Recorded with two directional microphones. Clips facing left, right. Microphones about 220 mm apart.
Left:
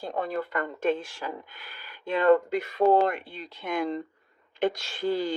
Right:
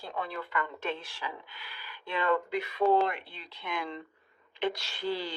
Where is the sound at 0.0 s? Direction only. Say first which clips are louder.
Left 7 dB; 45° left (ahead or behind).